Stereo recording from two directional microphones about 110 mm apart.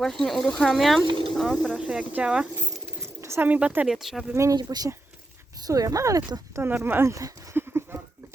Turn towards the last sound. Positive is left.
turn(degrees=-20)  # may be behind; listen again after turning